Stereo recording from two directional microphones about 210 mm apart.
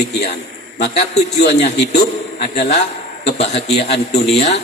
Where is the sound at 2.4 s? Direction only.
30° left (ahead or behind).